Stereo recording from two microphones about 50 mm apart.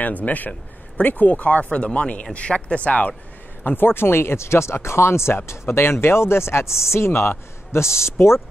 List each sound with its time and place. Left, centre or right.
0.0 s speech: left
3.6 s speech: left